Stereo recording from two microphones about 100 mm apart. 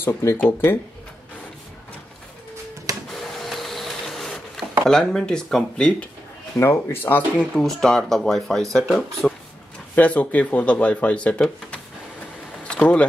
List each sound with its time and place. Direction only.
0.0 s speech: 25° left (ahead or behind)
3.1 s printer: centre (ahead or behind)
4.8 s speech: 5° left (ahead or behind)
6.6 s speech: 25° left (ahead or behind)
7.5 s speech: 5° left (ahead or behind)
9.2 s a sound: 5° left (ahead or behind)
9.9 s speech: 15° left (ahead or behind)
12.6 s a sound: 10° left (ahead or behind)